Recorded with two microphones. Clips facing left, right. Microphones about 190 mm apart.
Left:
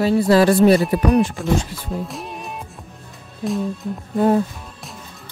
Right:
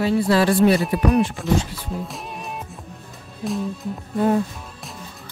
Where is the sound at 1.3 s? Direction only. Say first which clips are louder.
Left 1 dB; centre (ahead or behind).